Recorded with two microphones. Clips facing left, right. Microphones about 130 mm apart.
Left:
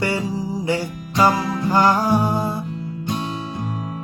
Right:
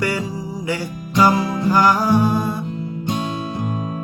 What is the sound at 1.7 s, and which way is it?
Music, 25° left (ahead or behind).